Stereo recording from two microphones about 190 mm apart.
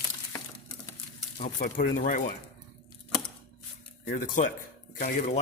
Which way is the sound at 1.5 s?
45° left (ahead or behind).